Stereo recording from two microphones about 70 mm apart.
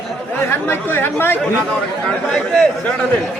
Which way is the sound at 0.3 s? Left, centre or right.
Left.